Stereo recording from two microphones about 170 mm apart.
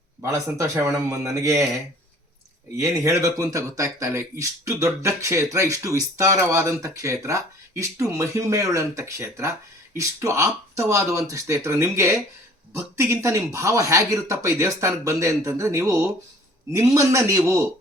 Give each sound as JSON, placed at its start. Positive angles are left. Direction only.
{"t": 0.2, "sound": "speech", "side_deg": -15}
{"t": 2.7, "sound": "a man's voice", "side_deg": -15}